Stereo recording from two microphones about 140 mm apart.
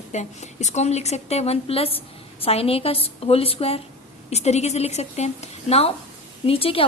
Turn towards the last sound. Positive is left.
turn(degrees=40)  # may be behind; listen again after turning